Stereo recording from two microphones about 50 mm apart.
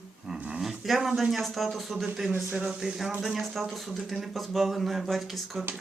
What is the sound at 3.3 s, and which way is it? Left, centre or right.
Speech, centre.